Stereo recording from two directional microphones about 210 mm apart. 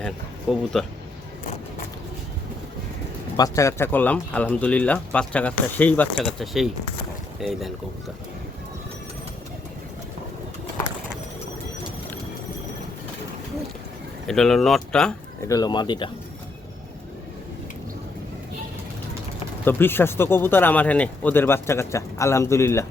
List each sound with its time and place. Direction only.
0.5 s speech: centre (ahead or behind)
3.3 s speech: 15° left (ahead or behind); by 7.7 s centre (ahead or behind)
14.3 s speech: centre (ahead or behind)
15.4 s speech: 20° left (ahead or behind)
19.6 s speech: 10° left (ahead or behind)